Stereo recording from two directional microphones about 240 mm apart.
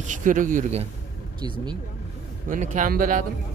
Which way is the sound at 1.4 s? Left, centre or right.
Centre.